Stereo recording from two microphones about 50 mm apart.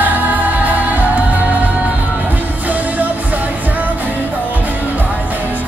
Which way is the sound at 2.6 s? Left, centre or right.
Right.